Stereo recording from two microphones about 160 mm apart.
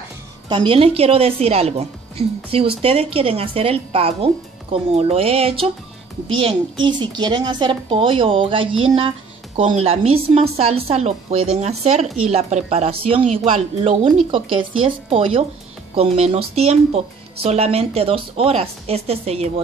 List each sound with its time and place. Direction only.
0.5 s speech: 30° right (ahead or behind)